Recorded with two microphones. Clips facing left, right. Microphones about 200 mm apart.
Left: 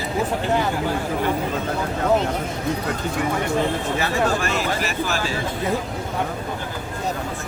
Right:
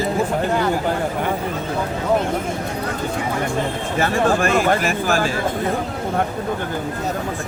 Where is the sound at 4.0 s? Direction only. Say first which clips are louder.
Right 6 dB; 50° right (ahead or behind).